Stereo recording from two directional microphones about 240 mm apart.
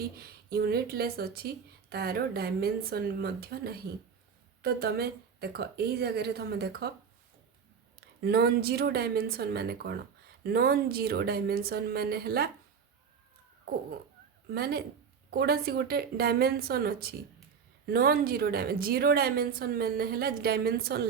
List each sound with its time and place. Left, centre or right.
0.2 s speech: right
8.2 s speech: right
14.5 s speech: right